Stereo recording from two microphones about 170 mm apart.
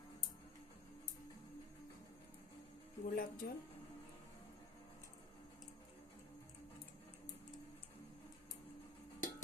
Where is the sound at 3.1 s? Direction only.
55° left (ahead or behind).